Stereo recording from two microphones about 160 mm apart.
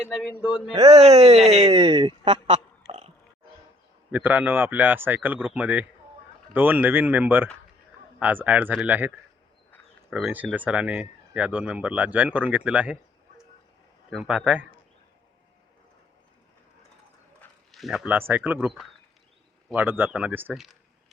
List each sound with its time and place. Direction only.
0.9 s speech: 45° right (ahead or behind)
2.5 s a sound: 45° right (ahead or behind)
4.1 s speech: 10° right (ahead or behind)
14.1 s speech: 5° right (ahead or behind)
17.7 s speech: centre (ahead or behind)
19.7 s speech: 10° right (ahead or behind)